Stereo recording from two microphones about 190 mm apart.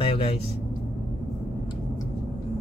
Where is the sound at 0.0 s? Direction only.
30° left (ahead or behind).